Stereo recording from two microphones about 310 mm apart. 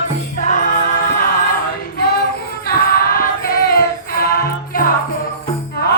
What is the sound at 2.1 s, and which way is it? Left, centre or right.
Music, left.